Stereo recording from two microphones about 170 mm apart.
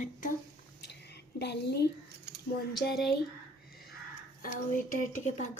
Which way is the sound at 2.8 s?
70° left (ahead or behind).